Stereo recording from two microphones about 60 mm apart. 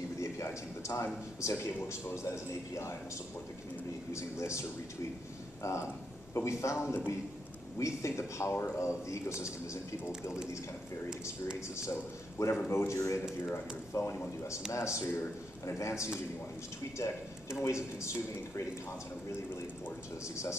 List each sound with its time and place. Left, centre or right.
0.2 s a sound: left
1.4 s a man's voice: left
4.1 s a man's voice: left
11.7 s a man's voice: left
17.6 s speech: left